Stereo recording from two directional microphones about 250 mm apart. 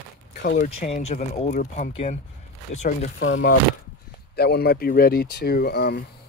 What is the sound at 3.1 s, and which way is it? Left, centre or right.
Speech, left.